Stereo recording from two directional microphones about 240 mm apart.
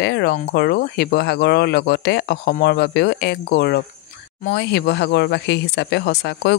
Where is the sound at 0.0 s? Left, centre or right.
Left.